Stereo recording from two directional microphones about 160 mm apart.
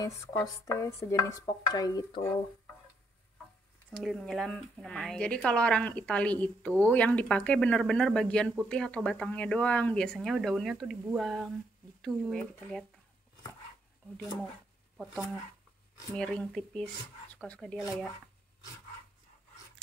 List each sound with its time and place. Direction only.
0.0 s dishes: 20° left (ahead or behind)
4.0 s speech: centre (ahead or behind)
16.2 s speech: 5° left (ahead or behind)